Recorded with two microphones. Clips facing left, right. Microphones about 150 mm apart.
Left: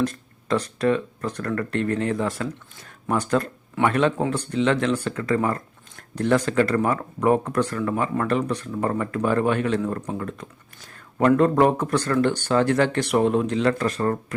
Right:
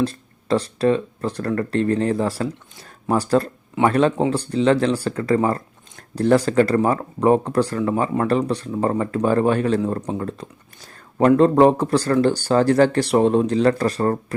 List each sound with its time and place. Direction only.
0.0 s speech: 30° right (ahead or behind)